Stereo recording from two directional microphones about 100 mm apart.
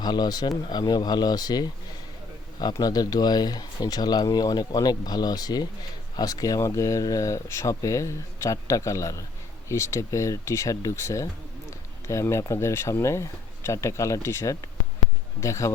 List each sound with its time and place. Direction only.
0.0 s speech: 45° left (ahead or behind)